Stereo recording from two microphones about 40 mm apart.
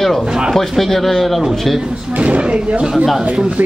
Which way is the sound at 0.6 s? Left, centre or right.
Centre.